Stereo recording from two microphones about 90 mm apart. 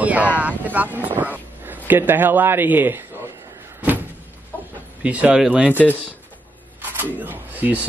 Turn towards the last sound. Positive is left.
turn(degrees=-15)  # may be behind; listen again after turning